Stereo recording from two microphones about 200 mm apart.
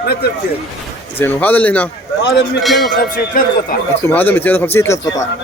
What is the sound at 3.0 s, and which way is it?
Speech, 45° left (ahead or behind).